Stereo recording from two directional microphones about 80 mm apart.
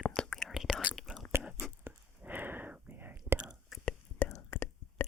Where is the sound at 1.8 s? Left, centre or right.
Right.